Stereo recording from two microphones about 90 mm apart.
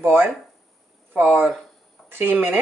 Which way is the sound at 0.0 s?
25° right (ahead or behind).